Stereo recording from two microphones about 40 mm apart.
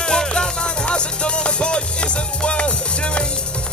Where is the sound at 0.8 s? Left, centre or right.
Left.